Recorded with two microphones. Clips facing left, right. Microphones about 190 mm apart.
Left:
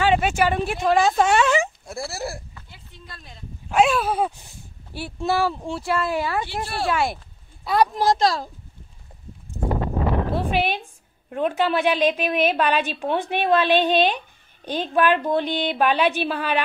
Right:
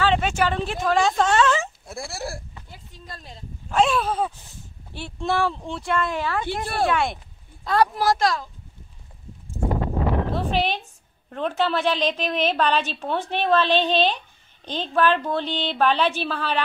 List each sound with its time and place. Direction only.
0.0 s a woman's voice: 10° left (ahead or behind)
1.9 s speech: centre (ahead or behind)
2.7 s speech: 40° right (ahead or behind)
3.7 s a woman's voice: 5° left (ahead or behind)
6.6 s speech: 50° right (ahead or behind)
6.9 s speech: 5° left (ahead or behind)
7.6 s a woman's voice: 15° left (ahead or behind)
10.3 s a sound: 10° left (ahead or behind)
11.2 s a woman's voice: 10° left (ahead or behind)